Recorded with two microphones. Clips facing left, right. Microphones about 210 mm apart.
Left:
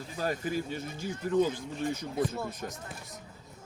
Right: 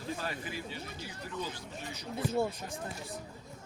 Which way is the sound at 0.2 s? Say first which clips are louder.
Left 7 dB; 45° left (ahead or behind).